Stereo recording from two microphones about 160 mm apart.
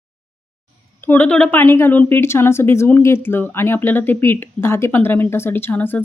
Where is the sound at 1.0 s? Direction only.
10° left (ahead or behind).